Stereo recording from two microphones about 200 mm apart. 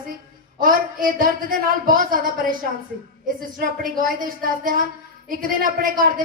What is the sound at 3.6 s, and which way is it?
Speech, 45° right (ahead or behind).